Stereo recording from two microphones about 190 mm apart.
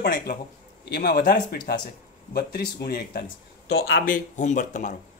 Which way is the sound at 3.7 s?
75° left (ahead or behind).